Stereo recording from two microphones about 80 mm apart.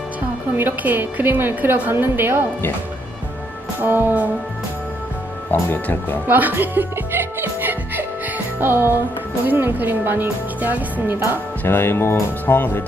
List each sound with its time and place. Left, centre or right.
0.5 s a woman's voice: right
3.8 s a woman's voice: right
5.5 s speech: left
6.2 s music: right
9.5 s a woman's voice: right
11.6 s speech: left